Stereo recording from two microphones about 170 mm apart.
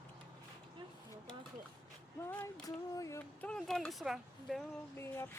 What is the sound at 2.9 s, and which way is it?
Speech, 20° left (ahead or behind).